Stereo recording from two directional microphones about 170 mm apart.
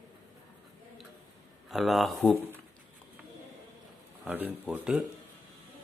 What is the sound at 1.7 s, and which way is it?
Speech, centre (ahead or behind).